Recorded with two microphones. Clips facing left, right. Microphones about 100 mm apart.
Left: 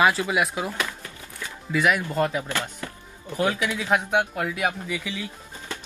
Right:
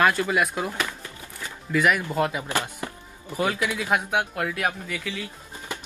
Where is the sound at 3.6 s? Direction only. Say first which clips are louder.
Left 1 dB; 15° right (ahead or behind); by 5.2 s 15° left (ahead or behind).